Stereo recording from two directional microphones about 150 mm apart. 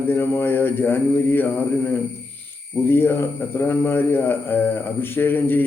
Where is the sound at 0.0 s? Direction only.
15° left (ahead or behind).